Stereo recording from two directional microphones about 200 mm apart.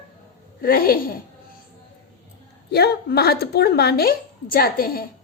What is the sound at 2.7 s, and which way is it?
A woman's voice, 55° left (ahead or behind).